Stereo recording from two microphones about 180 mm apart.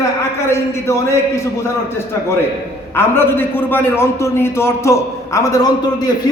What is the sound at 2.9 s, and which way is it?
A man's voice, 10° left (ahead or behind).